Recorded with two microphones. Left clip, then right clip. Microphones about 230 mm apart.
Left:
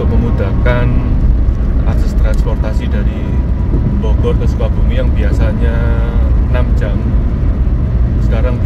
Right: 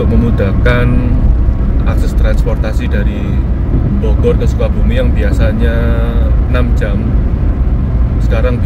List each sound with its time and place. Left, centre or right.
0.4 s speech: right